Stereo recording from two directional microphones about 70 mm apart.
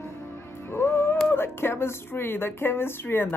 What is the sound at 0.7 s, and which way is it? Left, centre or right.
Music, left.